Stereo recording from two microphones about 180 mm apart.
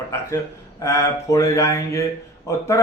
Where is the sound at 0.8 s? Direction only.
15° left (ahead or behind).